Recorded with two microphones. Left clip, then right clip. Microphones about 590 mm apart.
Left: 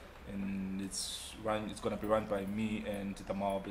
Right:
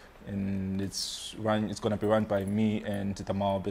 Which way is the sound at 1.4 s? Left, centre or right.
Right.